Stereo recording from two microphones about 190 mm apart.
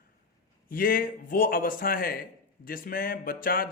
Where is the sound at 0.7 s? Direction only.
50° left (ahead or behind).